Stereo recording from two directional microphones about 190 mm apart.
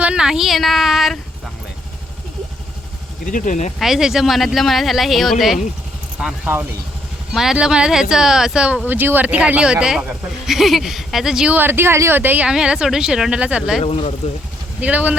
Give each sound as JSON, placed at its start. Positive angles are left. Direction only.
{"t": 0.0, "sound": "speech", "side_deg": -5}
{"t": 3.3, "sound": "speech", "side_deg": 40}
{"t": 3.8, "sound": "speech", "side_deg": 0}
{"t": 13.8, "sound": "speech", "side_deg": 30}
{"t": 14.8, "sound": "speech", "side_deg": -10}